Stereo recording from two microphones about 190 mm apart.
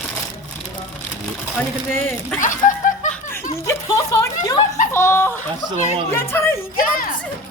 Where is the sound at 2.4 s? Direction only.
40° left (ahead or behind).